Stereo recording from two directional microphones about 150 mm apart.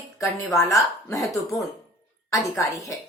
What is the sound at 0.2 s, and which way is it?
Speech, 20° left (ahead or behind).